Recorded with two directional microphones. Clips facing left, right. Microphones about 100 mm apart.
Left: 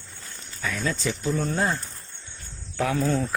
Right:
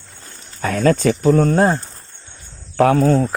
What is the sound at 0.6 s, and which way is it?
Speech, 55° right (ahead or behind).